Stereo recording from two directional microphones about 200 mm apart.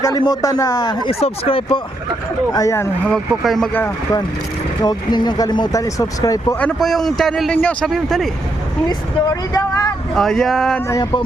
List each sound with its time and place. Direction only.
0.0 s speech: 20° left (ahead or behind)
2.5 s speech: 15° left (ahead or behind)
6.6 s a man's voice: 5° left (ahead or behind)
8.9 s speech: 15° left (ahead or behind)
10.2 s a man's voice: centre (ahead or behind)
10.8 s speech: 20° left (ahead or behind)